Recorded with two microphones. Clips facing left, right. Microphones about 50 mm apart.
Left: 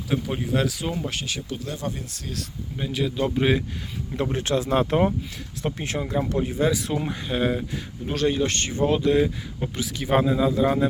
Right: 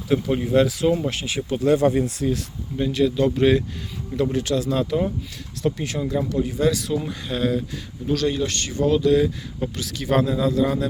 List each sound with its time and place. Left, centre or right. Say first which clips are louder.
0.1 s speech: right 6 dB; centre
1.4 s speech: right 13 dB; right
2.7 s speech: right 6 dB; centre
4.2 s speech: right 2 dB; left
5.6 s speech: right 4 dB; left